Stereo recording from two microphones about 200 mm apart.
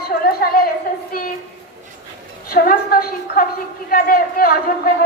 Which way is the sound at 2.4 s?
45° left (ahead or behind).